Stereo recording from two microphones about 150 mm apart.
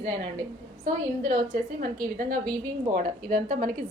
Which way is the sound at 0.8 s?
55° right (ahead or behind).